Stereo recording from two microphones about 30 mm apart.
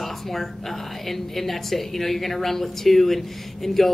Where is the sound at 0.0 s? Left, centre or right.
Centre.